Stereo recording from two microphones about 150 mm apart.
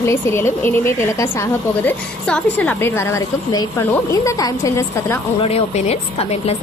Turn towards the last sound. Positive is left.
turn(degrees=45)  # may be behind; listen again after turning